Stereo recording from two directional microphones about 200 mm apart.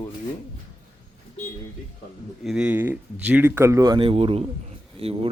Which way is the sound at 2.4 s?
5° right (ahead or behind).